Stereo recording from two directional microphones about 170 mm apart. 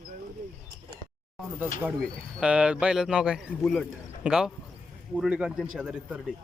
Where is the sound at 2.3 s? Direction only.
5° right (ahead or behind).